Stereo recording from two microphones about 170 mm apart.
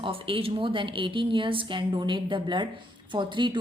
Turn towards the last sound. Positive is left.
turn(degrees=-30)  # may be behind; listen again after turning